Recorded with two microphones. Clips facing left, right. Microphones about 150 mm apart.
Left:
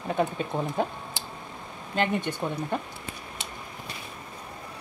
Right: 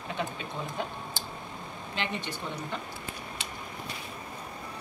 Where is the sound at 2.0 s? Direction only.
50° left (ahead or behind).